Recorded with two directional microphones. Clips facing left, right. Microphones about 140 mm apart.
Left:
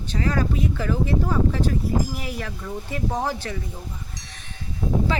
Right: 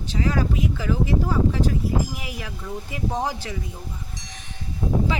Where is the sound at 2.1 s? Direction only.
10° right (ahead or behind).